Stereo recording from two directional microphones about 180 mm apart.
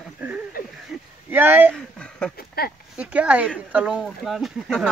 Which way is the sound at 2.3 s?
60° left (ahead or behind).